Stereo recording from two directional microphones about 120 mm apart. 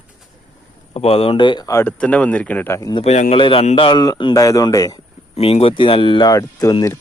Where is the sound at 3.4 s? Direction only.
50° left (ahead or behind); by 5.0 s 30° left (ahead or behind).